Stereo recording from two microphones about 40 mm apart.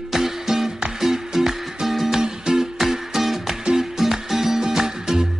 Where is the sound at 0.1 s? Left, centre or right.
Centre.